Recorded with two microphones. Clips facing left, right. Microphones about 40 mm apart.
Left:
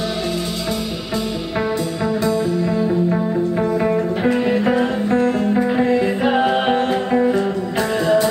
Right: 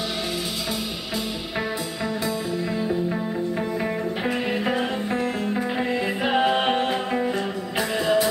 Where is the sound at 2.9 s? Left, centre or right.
Centre.